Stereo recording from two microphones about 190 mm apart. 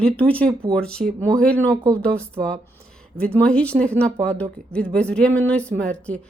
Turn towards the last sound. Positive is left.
turn(degrees=5)  # may be behind; listen again after turning